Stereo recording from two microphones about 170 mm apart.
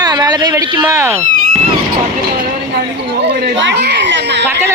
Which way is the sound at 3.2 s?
70° right (ahead or behind).